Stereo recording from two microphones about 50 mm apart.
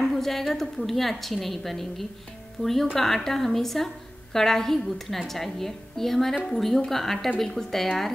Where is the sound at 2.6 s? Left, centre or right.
Left.